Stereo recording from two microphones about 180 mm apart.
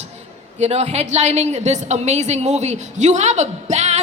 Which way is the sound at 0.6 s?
35° right (ahead or behind).